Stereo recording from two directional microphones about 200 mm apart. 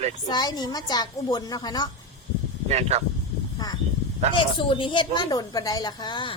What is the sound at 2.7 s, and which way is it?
Speech, 35° right (ahead or behind).